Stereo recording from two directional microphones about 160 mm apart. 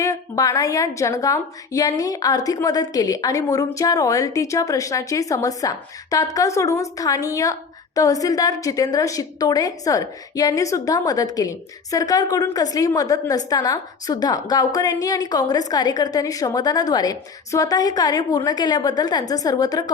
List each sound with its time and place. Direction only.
0.0 s a woman's voice: 20° left (ahead or behind)